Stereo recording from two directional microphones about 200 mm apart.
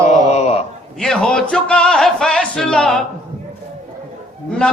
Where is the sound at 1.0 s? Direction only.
5° left (ahead or behind).